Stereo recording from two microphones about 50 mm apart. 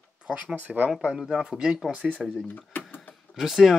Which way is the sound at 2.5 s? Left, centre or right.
Left.